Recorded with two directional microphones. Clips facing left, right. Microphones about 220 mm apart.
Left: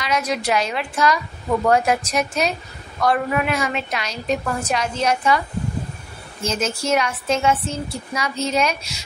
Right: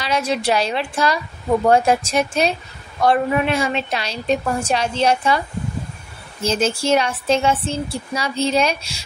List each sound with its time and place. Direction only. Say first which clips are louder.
0.0 s a woman's voice: right 2 dB; 30° right (ahead or behind)
6.4 s speech: right 4 dB; 30° right (ahead or behind)